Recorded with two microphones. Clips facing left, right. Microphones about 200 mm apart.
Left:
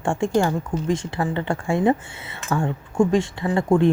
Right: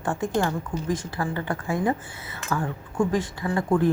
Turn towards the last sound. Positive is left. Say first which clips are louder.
# left 4 dB
turn(degrees=25)  # may be behind; listen again after turning